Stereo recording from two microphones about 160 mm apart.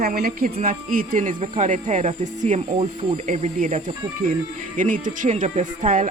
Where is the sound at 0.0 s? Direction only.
70° right (ahead or behind).